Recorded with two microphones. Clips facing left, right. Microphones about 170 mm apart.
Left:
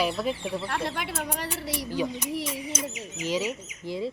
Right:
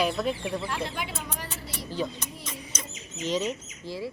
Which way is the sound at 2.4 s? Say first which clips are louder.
Left 8 dB; 10° left (ahead or behind).